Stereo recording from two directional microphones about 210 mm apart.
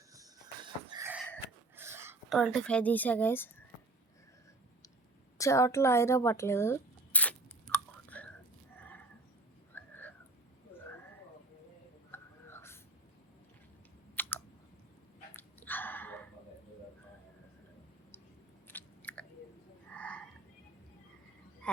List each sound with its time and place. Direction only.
0.1 s music: 20° right (ahead or behind)
1.7 s whispering: 10° right (ahead or behind)
2.3 s speech: 5° left (ahead or behind)
5.4 s a sound: 15° left (ahead or behind)
12.1 s whispering: 10° left (ahead or behind)
14.2 s chewing: 10° left (ahead or behind)
15.3 s a sound: 10° left (ahead or behind)
18.7 s biting: 10° left (ahead or behind)
19.9 s a sound: 5° left (ahead or behind)